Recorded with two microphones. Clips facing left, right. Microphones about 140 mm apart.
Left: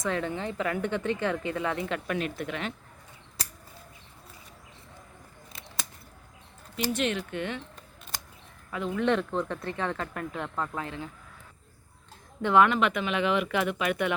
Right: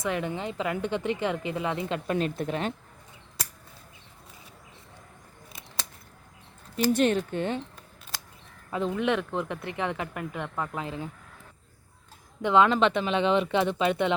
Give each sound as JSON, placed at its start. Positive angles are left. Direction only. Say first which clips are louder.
{"t": 0.0, "sound": "speech", "louder": "even", "side_deg": -15}
{"t": 6.7, "sound": "speech", "louder": "right 6 dB", "side_deg": -40}
{"t": 8.7, "sound": "speech", "louder": "right 4 dB", "side_deg": -25}
{"t": 9.3, "sound": "speech", "louder": "left 1 dB", "side_deg": -15}
{"t": 10.8, "sound": "speech", "louder": "right 3 dB", "side_deg": -25}
{"t": 12.4, "sound": "speech", "louder": "even", "side_deg": -15}
{"t": 12.6, "sound": "speech", "louder": "right 2 dB", "side_deg": -30}